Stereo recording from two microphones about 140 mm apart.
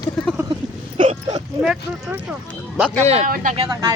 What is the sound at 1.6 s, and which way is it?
Speech, 5° right (ahead or behind).